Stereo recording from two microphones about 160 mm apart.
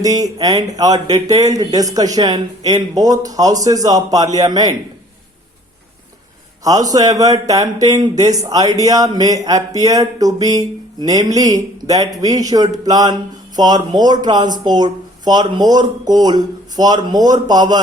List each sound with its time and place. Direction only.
0.0 s speech: 20° right (ahead or behind)
6.7 s speech: 20° right (ahead or behind)